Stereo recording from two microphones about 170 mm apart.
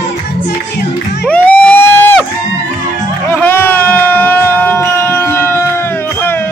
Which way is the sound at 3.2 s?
10° left (ahead or behind).